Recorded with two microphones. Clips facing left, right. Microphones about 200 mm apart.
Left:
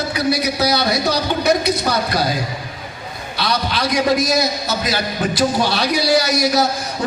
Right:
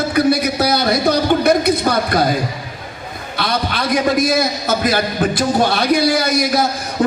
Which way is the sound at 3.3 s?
55° right (ahead or behind).